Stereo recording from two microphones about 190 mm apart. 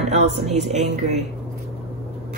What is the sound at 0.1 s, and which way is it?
Speech, 35° right (ahead or behind).